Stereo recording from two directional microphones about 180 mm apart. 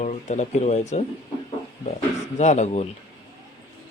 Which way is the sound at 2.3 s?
40° left (ahead or behind).